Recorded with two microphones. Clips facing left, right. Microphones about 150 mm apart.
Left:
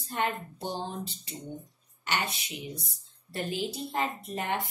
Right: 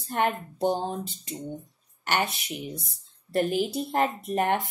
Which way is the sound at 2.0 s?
55° right (ahead or behind).